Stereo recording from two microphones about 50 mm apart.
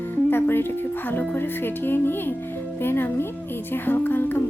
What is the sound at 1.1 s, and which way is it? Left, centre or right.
Speech, left.